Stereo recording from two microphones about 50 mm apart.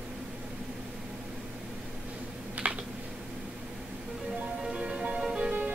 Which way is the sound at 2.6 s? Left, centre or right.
Right.